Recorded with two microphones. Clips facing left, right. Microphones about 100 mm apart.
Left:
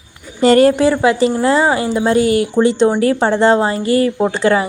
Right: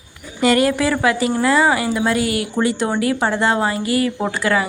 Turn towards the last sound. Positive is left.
turn(degrees=30)  # may be behind; listen again after turning